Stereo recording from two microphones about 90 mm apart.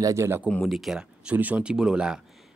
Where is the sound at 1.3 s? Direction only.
15° right (ahead or behind).